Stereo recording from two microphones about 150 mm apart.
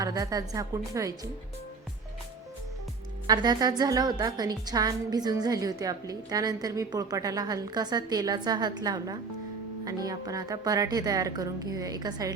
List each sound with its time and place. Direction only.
0.0 s a woman's voice: 25° right (ahead or behind)
3.2 s a woman's voice: 25° right (ahead or behind)